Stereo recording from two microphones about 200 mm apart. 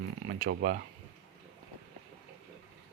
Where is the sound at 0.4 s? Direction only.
45° right (ahead or behind).